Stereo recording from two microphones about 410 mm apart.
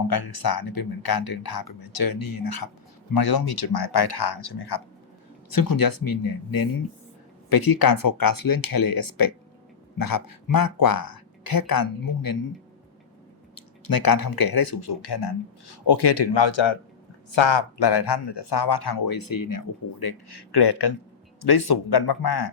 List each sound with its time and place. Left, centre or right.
0.1 s speech: left
5.5 s speech: left
13.6 s speech: left